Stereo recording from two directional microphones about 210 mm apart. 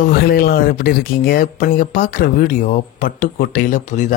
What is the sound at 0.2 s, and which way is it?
Speech, 45° left (ahead or behind).